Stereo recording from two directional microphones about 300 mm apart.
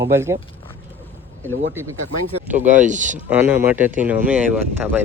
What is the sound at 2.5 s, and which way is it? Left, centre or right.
Speech, right.